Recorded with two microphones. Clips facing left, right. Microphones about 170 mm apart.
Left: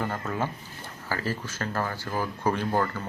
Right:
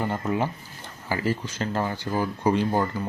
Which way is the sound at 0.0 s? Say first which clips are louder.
Right 4 dB; 15° right (ahead or behind).